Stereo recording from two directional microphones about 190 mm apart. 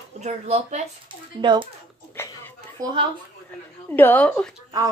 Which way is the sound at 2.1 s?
10° left (ahead or behind).